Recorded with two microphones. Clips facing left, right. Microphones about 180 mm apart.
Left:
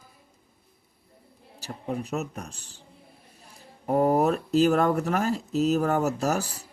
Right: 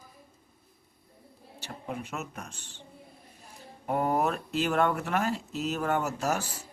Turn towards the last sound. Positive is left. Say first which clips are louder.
# left 4 dB
turn(degrees=40)  # may be behind; listen again after turning